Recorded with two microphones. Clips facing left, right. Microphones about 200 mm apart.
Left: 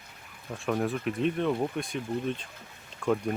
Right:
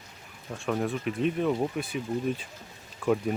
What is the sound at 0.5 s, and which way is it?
Speech, centre (ahead or behind).